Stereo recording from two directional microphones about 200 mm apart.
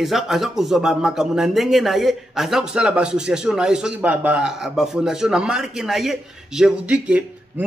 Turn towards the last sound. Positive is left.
turn(degrees=-5)  # may be behind; listen again after turning